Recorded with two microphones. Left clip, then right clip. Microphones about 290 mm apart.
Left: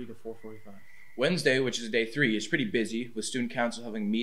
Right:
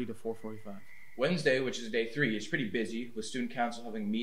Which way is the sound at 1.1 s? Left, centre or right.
Left.